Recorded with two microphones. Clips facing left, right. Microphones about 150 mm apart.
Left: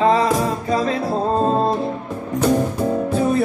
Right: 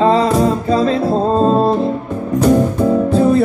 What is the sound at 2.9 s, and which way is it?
Music, 30° right (ahead or behind).